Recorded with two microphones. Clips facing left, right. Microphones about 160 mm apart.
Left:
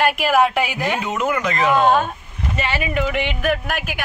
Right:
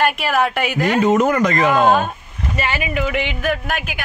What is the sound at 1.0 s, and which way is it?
Speech, 40° right (ahead or behind).